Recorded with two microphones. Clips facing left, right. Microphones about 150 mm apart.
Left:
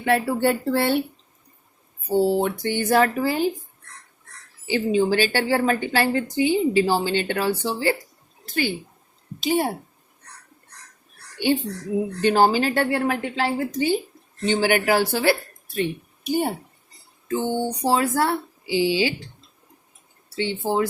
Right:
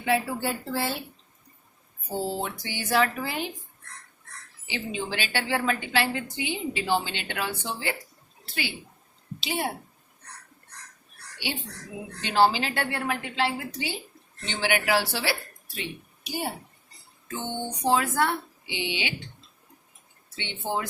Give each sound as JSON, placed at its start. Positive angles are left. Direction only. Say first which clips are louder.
{"t": 0.0, "sound": "speech", "louder": "left 6 dB", "side_deg": 60}
{"t": 2.3, "sound": "a woman's voice", "louder": "left 10 dB", "side_deg": 55}
{"t": 4.7, "sound": "a woman's voice", "louder": "left 12 dB", "side_deg": 40}
{"t": 8.4, "sound": "a woman's voice", "louder": "left 9 dB", "side_deg": 45}
{"t": 12.2, "sound": "a woman's voice", "louder": "left 4 dB", "side_deg": 45}
{"t": 17.2, "sound": "a woman's voice", "louder": "left 9 dB", "side_deg": 35}
{"t": 20.3, "sound": "a woman's voice", "louder": "left 8 dB", "side_deg": 35}